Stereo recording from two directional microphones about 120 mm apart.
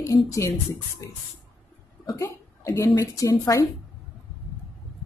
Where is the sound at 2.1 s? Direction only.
25° left (ahead or behind).